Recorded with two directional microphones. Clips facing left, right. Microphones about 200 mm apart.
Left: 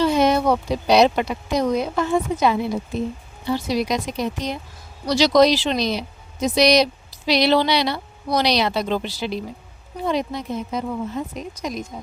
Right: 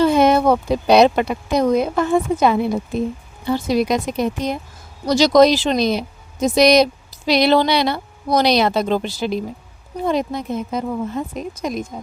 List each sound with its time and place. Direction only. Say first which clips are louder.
0.0 s speech: right 4 dB; 55° right (ahead or behind)